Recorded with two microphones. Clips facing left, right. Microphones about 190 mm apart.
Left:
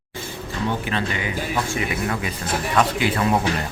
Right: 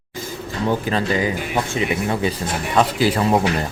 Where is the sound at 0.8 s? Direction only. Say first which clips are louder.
Right 5 dB; 35° right (ahead or behind).